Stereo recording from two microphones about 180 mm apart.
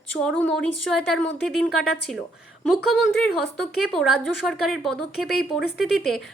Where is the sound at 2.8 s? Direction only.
Centre (ahead or behind).